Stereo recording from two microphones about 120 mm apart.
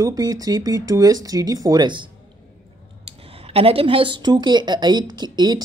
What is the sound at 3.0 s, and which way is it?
A woman's voice, 55° right (ahead or behind).